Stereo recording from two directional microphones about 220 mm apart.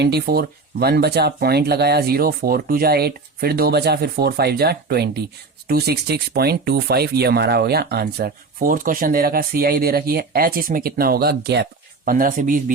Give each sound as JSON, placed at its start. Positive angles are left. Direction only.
{"t": 0.0, "sound": "speech", "side_deg": -50}